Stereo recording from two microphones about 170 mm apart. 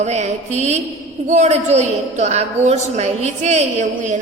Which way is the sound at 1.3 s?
45° right (ahead or behind).